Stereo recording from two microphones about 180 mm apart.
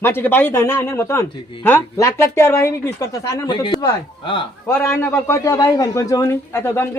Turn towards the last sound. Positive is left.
turn(degrees=15)  # may be behind; listen again after turning